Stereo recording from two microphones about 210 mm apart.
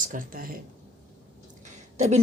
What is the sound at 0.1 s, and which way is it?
Speech, 40° right (ahead or behind).